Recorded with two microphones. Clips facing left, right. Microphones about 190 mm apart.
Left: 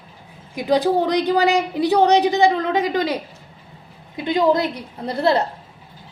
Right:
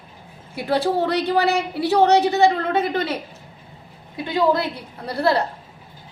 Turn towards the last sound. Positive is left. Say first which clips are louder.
# left 2 dB
turn(degrees=20)  # may be behind; listen again after turning